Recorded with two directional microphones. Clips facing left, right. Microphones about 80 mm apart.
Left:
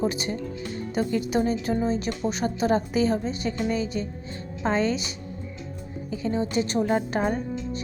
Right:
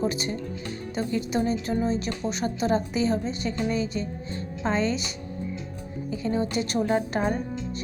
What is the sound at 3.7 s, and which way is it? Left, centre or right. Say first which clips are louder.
A woman's voice: even; right.